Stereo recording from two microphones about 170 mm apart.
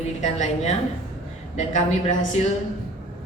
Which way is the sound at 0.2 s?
45° left (ahead or behind).